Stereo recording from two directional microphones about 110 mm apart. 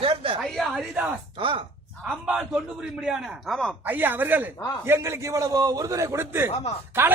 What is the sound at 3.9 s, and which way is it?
A man's voice, 15° right (ahead or behind).